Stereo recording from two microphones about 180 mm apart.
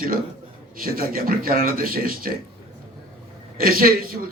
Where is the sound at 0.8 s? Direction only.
55° right (ahead or behind).